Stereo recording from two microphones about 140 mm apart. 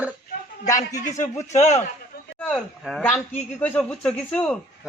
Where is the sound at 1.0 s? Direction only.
60° left (ahead or behind).